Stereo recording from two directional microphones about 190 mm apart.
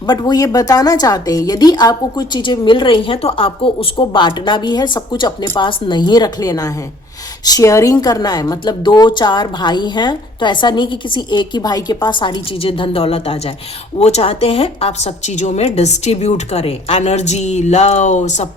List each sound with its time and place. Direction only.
0.1 s a woman's voice: 20° left (ahead or behind); by 18.4 s 40° left (ahead or behind)